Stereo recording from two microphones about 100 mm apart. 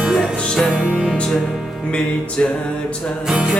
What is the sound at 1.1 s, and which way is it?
Music, 10° left (ahead or behind).